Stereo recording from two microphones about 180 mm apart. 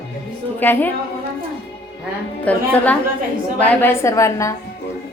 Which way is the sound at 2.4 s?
10° left (ahead or behind).